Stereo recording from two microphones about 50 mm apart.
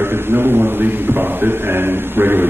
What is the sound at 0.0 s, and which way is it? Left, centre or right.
A man's voice, right.